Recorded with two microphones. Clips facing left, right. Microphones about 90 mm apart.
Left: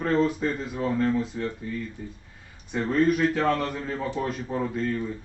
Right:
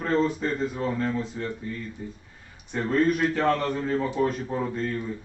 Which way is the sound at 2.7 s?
5° left (ahead or behind).